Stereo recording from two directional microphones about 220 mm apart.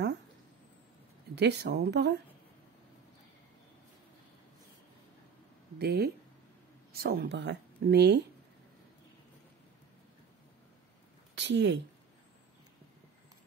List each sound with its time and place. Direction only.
1.3 s a woman's voice: 50° right (ahead or behind)
5.8 s a woman's voice: 45° right (ahead or behind)
11.3 s speech: 55° right (ahead or behind)